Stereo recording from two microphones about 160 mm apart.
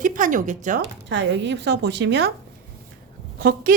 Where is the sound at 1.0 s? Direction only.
90° right.